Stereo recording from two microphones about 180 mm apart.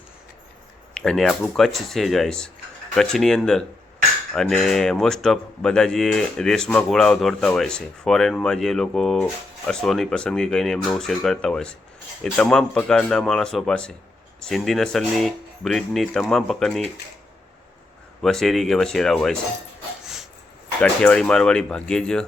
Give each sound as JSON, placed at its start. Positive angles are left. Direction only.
{"t": 0.9, "sound": "speech", "side_deg": 0}
{"t": 18.2, "sound": "speech", "side_deg": 0}
{"t": 20.8, "sound": "speech", "side_deg": 5}